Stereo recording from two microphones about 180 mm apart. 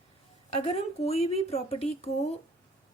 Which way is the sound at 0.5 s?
35° left (ahead or behind).